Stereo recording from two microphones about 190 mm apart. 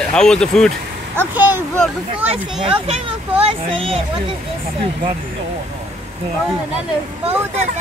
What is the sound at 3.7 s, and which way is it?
Speech, 30° right (ahead or behind).